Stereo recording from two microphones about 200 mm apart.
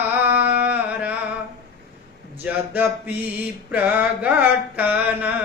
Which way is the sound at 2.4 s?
5° right (ahead or behind).